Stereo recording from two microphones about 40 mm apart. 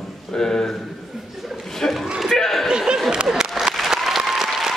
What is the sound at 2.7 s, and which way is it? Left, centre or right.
Speech, centre.